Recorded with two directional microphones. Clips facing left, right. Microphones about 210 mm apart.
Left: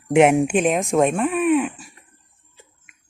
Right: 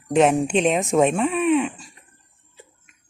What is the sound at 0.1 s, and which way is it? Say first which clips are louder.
Speech: left 2 dB; 10° left (ahead or behind).